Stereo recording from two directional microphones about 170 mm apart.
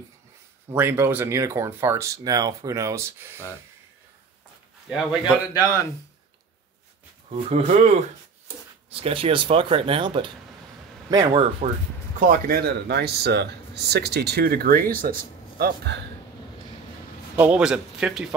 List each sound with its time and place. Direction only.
0.7 s speech: 15° right (ahead or behind)
4.8 s speech: 5° right (ahead or behind)
5.5 s speech: 15° left (ahead or behind)
7.2 s speech: 40° right (ahead or behind)
9.0 s speech: 30° right (ahead or behind)
11.6 s speech: 35° right (ahead or behind)
12.2 s speech: 55° right (ahead or behind)
15.6 s speech: 70° right (ahead or behind)
17.4 s speech: 5° right (ahead or behind)